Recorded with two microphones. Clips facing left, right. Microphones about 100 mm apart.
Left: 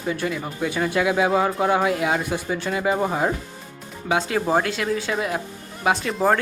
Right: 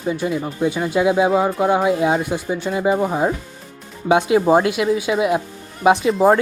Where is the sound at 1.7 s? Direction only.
20° right (ahead or behind).